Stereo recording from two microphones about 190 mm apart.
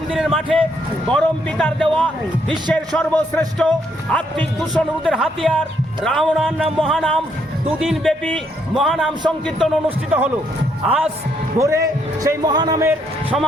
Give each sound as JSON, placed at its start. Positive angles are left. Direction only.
{"t": 0.1, "sound": "a man's voice", "side_deg": 0}